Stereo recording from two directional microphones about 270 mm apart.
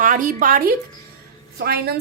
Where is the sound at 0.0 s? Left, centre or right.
Right.